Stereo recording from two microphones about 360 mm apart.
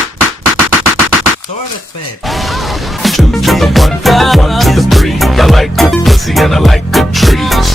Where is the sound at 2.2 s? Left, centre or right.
Centre.